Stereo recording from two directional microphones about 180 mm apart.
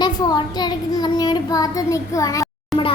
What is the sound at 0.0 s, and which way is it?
A child's voice, 20° left (ahead or behind).